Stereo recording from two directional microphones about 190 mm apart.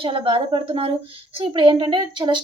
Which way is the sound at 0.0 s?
30° right (ahead or behind).